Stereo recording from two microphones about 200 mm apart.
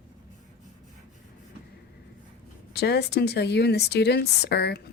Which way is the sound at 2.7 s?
55° left (ahead or behind).